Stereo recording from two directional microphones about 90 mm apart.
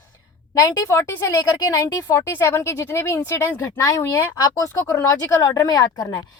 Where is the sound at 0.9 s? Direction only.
30° left (ahead or behind).